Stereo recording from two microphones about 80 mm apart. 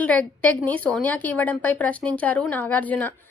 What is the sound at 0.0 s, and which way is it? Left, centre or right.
A woman's voice, centre.